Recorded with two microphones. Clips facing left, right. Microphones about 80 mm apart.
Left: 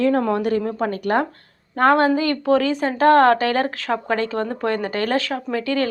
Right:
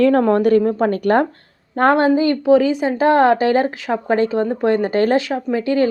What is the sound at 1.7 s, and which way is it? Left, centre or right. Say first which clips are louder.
Speech: right 2 dB; right.